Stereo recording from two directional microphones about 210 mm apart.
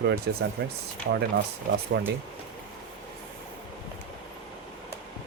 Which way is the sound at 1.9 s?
50° right (ahead or behind).